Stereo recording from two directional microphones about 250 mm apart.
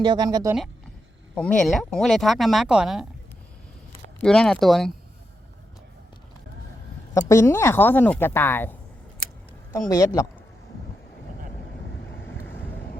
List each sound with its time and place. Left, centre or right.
0.0 s speech: centre
1.4 s speech: centre
4.2 s speech: centre
7.1 s speech: centre
9.9 s speech: centre
12.2 s vehicle: centre